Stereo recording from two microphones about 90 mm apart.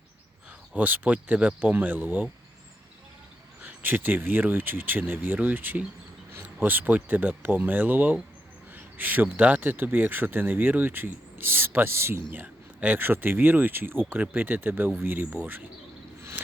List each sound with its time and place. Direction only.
0.7 s speech: 15° right (ahead or behind)
3.6 s speech: 20° right (ahead or behind)